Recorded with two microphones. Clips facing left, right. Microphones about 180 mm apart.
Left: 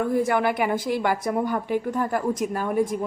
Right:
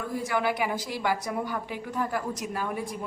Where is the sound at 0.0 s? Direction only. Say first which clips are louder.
Left 7 dB; 55° left (ahead or behind).